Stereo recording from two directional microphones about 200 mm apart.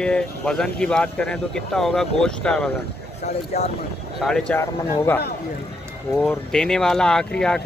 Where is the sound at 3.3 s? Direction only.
35° left (ahead or behind).